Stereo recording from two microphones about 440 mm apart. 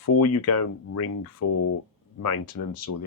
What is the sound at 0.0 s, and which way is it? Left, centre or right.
Speech, left.